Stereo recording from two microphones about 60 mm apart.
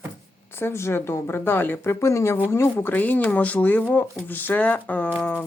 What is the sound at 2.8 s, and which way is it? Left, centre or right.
Speech, left.